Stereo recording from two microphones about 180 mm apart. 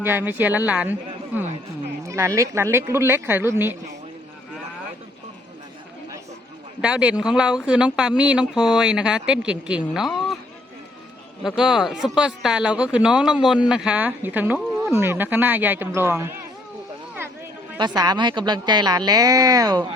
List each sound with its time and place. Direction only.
0.0 s speech: 10° right (ahead or behind)
6.8 s speech: 5° right (ahead or behind)
11.4 s speech: 5° right (ahead or behind)
17.7 s a woman's voice: 25° right (ahead or behind)